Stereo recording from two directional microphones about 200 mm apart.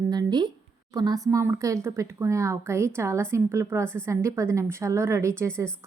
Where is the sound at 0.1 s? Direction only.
20° right (ahead or behind).